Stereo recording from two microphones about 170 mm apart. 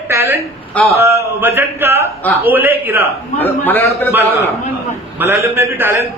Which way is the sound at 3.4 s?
10° left (ahead or behind).